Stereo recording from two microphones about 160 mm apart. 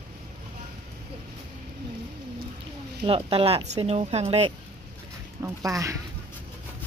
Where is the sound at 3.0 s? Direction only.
35° right (ahead or behind).